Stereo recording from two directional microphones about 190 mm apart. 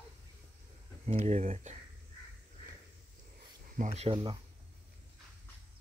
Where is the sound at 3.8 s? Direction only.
35° right (ahead or behind).